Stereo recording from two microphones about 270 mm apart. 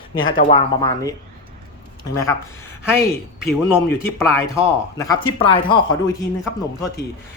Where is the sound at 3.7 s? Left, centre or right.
Centre.